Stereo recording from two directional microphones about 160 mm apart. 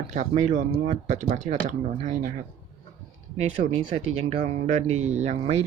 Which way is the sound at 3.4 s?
45° right (ahead or behind).